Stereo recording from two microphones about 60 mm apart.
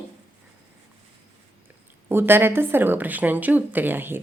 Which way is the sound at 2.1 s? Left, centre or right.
Right.